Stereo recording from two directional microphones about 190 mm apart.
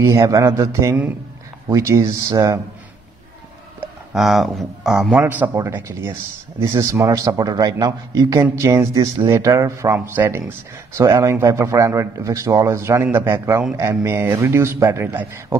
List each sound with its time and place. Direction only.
0.0 s a man's voice: 15° right (ahead or behind)
3.8 s a man's voice: centre (ahead or behind)